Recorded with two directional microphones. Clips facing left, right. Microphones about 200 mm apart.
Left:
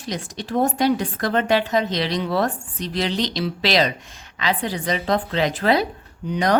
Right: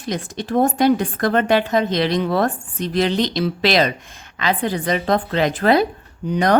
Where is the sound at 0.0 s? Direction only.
55° right (ahead or behind).